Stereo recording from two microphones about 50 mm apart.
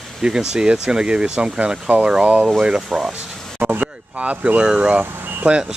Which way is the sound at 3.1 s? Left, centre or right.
Right.